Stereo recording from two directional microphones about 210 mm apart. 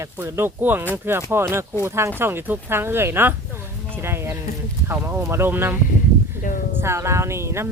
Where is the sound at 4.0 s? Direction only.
10° right (ahead or behind).